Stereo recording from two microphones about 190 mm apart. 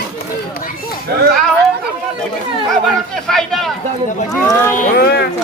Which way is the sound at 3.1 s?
Centre (ahead or behind).